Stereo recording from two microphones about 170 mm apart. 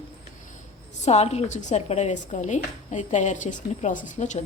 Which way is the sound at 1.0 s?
40° left (ahead or behind).